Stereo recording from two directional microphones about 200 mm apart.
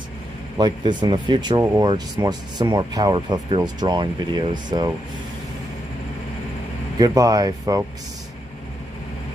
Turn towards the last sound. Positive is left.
turn(degrees=-20)  # may be behind; listen again after turning